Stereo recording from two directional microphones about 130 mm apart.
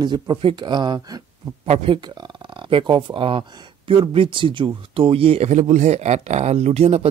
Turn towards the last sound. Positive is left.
turn(degrees=-55)  # may be behind; listen again after turning